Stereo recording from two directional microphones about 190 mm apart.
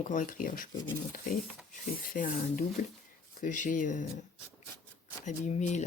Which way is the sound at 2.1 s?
45° left (ahead or behind).